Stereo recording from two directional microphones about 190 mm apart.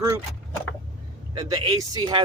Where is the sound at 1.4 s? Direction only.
20° right (ahead or behind).